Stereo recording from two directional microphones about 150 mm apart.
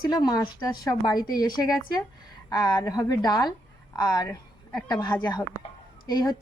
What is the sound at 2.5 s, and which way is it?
A woman's voice, 25° left (ahead or behind).